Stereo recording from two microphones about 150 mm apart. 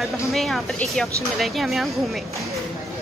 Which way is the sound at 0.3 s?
Centre (ahead or behind).